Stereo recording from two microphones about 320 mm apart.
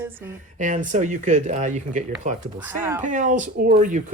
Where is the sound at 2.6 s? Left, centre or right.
Centre.